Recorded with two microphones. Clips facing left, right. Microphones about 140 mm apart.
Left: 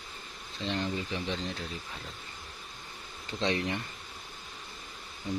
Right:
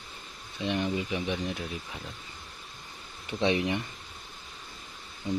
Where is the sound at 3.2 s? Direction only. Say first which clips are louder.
Right 4 dB; 15° right (ahead or behind).